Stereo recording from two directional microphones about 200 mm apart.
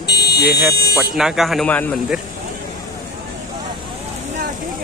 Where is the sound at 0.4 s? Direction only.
5° right (ahead or behind).